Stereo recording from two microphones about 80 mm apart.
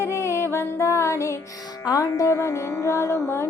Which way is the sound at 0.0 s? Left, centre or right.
Left.